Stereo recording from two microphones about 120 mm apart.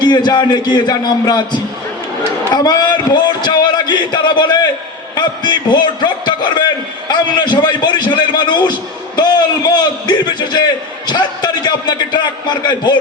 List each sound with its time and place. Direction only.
0.0 s a man's voice: 35° left (ahead or behind)